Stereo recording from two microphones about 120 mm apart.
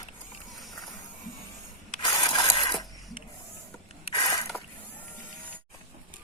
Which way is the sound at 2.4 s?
45° left (ahead or behind).